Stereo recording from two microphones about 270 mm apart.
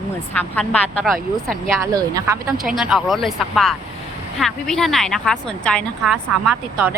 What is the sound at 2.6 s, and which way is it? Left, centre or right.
A woman's voice, centre.